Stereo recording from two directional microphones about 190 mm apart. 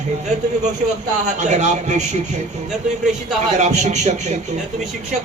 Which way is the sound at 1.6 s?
40° right (ahead or behind).